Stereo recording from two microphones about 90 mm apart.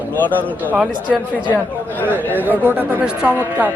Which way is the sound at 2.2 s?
20° left (ahead or behind).